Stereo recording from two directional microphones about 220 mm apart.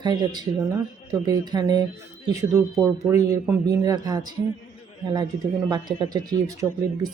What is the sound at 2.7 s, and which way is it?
Speech, 5° right (ahead or behind).